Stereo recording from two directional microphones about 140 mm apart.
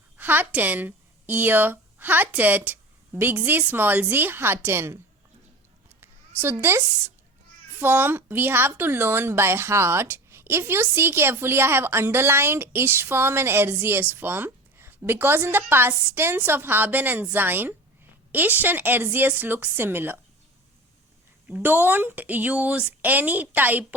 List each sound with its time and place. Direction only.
0.2 s speech: 15° right (ahead or behind)
6.0 s a sound: 15° right (ahead or behind)
7.8 s a woman's voice: 15° right (ahead or behind)
21.4 s a woman's voice: 15° right (ahead or behind)